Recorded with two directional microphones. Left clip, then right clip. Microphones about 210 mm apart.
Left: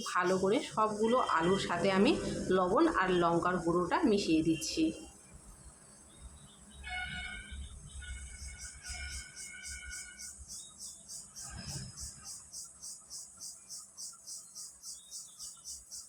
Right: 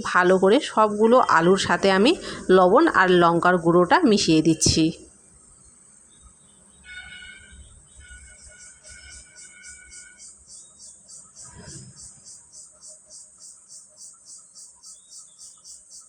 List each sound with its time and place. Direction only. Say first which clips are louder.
0.0 s speech: right 13 dB; 40° right (ahead or behind)